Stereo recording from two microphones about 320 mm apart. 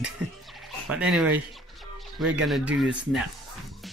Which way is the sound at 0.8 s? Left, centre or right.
Centre.